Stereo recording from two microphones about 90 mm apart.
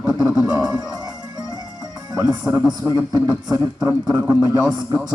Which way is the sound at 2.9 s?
45° right (ahead or behind).